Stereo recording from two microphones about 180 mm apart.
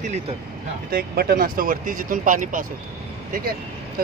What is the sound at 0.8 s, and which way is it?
Speech, 55° right (ahead or behind).